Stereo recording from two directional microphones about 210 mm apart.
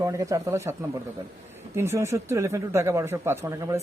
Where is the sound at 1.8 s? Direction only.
10° right (ahead or behind).